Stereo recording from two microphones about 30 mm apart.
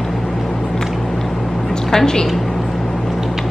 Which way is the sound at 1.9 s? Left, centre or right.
Left.